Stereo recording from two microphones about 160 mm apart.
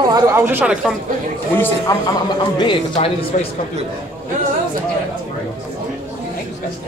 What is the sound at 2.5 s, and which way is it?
Speech, 30° left (ahead or behind).